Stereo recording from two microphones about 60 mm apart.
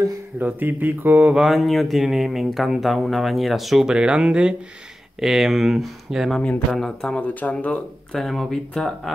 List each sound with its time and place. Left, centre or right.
0.4 s speech: right
1.3 s speech: centre
3.8 s speech: centre
6.7 s speech: centre
7.2 s speech: left
8.1 s speech: centre